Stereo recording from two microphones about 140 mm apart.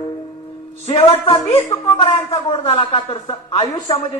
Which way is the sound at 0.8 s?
45° left (ahead or behind).